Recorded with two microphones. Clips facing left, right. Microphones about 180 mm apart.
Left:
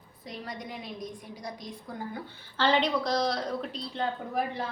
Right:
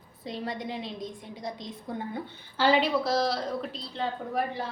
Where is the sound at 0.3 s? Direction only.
25° right (ahead or behind).